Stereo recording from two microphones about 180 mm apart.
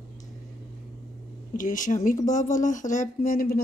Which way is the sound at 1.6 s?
45° left (ahead or behind).